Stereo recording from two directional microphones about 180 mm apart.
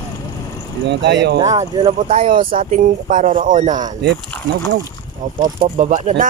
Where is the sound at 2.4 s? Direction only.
50° right (ahead or behind).